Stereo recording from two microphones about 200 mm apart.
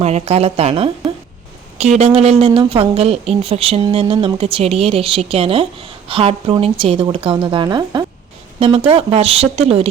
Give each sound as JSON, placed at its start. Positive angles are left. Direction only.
{"t": 0.0, "sound": "a woman's voice", "side_deg": -30}